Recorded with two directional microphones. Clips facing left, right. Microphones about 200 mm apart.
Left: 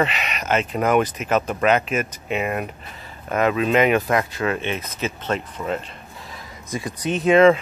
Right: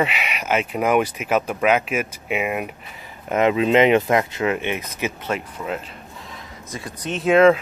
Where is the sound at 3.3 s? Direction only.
20° right (ahead or behind); by 5.8 s 5° right (ahead or behind).